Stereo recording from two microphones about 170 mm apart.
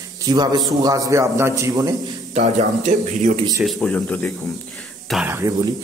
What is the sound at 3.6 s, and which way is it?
Speech, 5° left (ahead or behind).